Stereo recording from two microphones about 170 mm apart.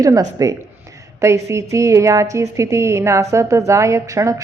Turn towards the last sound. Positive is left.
turn(degrees=-20)  # may be behind; listen again after turning